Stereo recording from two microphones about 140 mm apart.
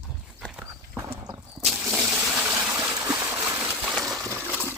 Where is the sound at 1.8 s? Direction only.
5° right (ahead or behind).